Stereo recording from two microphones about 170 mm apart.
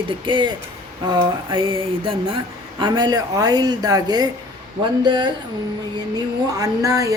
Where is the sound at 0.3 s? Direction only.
30° right (ahead or behind).